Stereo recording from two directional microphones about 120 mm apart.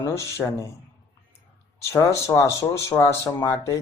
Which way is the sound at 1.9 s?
25° left (ahead or behind).